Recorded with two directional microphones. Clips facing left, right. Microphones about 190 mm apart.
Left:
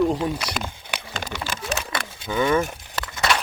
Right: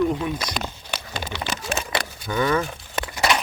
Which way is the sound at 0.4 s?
5° left (ahead or behind).